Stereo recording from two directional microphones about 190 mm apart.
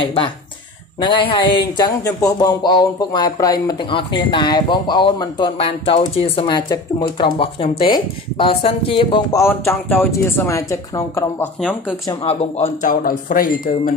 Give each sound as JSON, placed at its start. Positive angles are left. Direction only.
{"t": 0.0, "sound": "speech", "side_deg": 25}
{"t": 9.4, "sound": "speech", "side_deg": 10}
{"t": 12.1, "sound": "speech", "side_deg": 30}
{"t": 13.0, "sound": "speech", "side_deg": 45}